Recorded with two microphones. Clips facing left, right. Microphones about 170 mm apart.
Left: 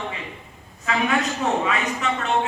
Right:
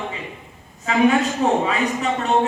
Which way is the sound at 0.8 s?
30° right (ahead or behind).